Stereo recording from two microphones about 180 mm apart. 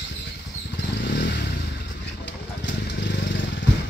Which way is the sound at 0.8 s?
70° left (ahead or behind).